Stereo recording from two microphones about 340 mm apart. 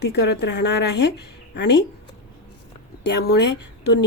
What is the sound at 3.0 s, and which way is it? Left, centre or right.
Speech, left.